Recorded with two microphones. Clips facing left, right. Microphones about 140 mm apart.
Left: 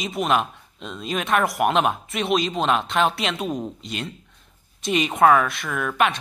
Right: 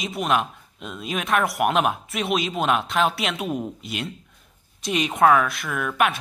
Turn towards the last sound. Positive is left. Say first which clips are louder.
# left 1 dB
turn(degrees=0)  # may be behind; listen again after turning